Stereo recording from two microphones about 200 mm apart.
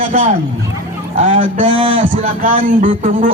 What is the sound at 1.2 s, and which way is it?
Speech, 40° right (ahead or behind).